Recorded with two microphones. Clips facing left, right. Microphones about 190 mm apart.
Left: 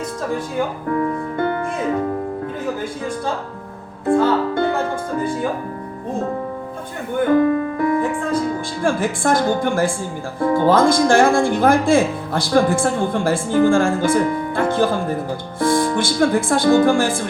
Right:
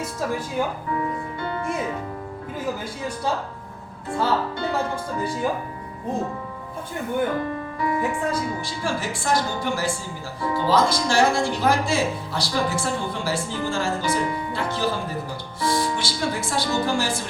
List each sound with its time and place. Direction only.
0.9 s speech: 50° left (ahead or behind)
4.0 s speech: 55° left (ahead or behind)
7.3 s speech: 55° left (ahead or behind)